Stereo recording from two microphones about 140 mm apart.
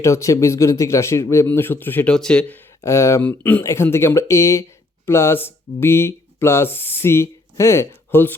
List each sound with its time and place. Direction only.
0.0 s speech: 20° left (ahead or behind)
2.8 s speech: 20° left (ahead or behind)